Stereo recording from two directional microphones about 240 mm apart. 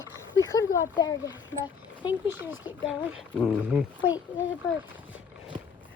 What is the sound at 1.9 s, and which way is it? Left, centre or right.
Speech, centre.